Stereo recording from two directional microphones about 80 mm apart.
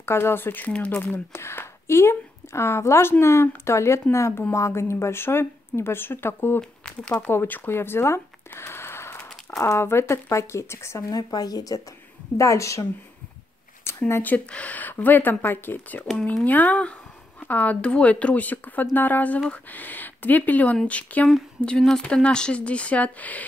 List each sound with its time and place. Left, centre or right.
0.0 s speech: left
6.8 s speech: centre
7.2 s speech: left
11.1 s speech: left
12.4 s speech: left
13.8 s a sound: left
14.3 s speech: centre